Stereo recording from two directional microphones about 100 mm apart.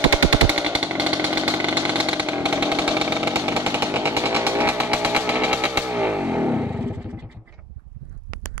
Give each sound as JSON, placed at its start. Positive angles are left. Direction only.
{"t": 0.5, "sound": "vehicle", "side_deg": -15}